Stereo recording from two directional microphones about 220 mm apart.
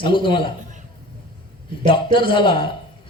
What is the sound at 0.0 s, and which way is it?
Speech, 20° left (ahead or behind).